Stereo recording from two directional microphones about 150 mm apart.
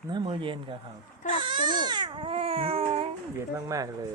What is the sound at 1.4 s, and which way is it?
Baby cry, 35° right (ahead or behind).